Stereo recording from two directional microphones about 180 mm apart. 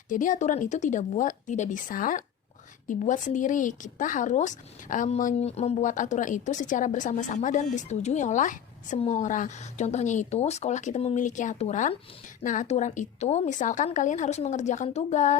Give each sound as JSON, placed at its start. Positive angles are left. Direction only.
{"t": 0.1, "sound": "speech", "side_deg": 45}